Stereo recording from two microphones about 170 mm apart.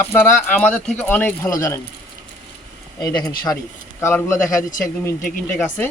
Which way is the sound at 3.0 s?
25° left (ahead or behind).